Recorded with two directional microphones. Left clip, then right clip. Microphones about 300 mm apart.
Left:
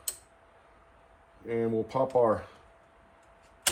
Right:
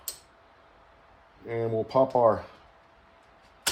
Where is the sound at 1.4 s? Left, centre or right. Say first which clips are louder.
Right 1 dB; right.